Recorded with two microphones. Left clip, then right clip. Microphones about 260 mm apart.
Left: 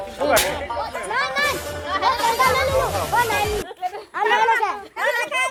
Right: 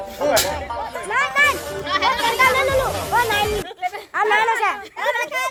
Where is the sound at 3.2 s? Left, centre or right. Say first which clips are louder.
Right 2 dB; right.